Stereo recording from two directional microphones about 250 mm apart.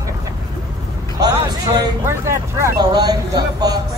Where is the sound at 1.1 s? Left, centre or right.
Centre.